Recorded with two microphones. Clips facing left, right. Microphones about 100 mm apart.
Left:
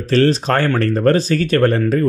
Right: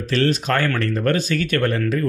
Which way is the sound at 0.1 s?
35° left (ahead or behind).